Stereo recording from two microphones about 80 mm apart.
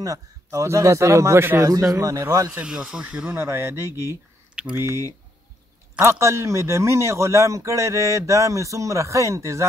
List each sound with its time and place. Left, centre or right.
0.0 s a man's voice: right
1.6 s a man's voice: right
2.6 s speech: centre
3.3 s a man's voice: right